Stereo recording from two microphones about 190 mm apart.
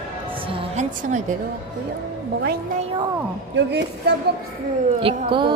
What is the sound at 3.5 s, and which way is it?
Speech, 60° right (ahead or behind).